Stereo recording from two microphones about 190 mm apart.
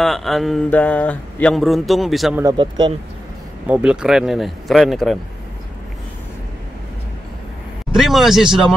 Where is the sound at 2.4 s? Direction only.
25° right (ahead or behind).